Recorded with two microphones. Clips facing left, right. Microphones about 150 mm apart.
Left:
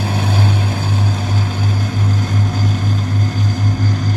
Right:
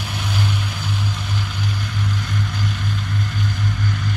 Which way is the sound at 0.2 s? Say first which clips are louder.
Left 3 dB; 45° left (ahead or behind).